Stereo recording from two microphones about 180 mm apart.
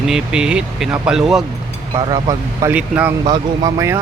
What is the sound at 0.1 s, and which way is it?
Speech, 5° right (ahead or behind).